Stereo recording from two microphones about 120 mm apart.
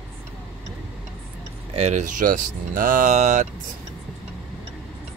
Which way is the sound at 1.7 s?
70° right (ahead or behind).